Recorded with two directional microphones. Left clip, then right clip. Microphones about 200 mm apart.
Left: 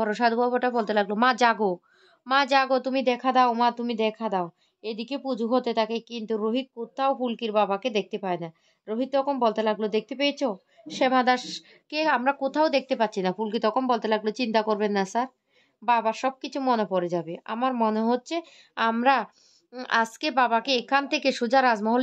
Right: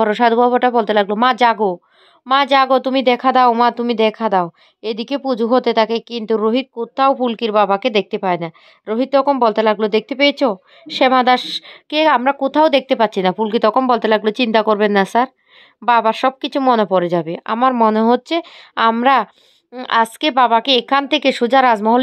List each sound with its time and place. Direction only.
0.0 s a woman's voice: 30° right (ahead or behind)